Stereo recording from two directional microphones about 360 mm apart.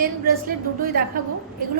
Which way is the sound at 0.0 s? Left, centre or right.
Right.